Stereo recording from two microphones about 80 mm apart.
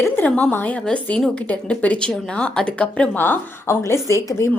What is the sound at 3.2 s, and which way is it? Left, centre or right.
A woman's voice, left.